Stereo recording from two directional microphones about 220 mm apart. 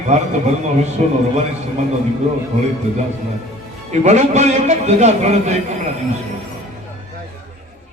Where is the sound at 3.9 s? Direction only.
30° right (ahead or behind).